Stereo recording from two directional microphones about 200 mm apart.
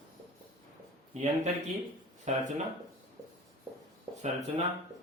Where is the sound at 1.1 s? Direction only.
35° right (ahead or behind).